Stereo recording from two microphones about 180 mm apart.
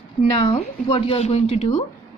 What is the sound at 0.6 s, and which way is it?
Speech, 30° left (ahead or behind).